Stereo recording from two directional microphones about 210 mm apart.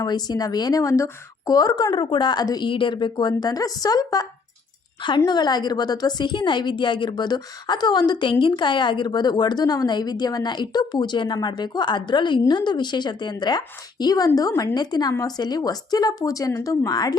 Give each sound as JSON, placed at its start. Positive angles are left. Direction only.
{"t": 0.0, "sound": "a woman's voice", "side_deg": 20}